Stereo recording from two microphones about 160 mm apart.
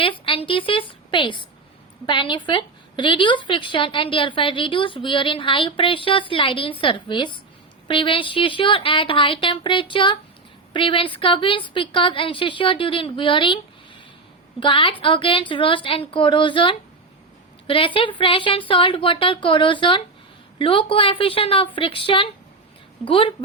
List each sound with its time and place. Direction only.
0.0 s a woman's voice: 35° left (ahead or behind)
14.6 s a woman's voice: 30° left (ahead or behind)